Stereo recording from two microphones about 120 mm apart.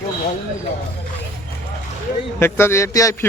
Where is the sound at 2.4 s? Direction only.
20° left (ahead or behind).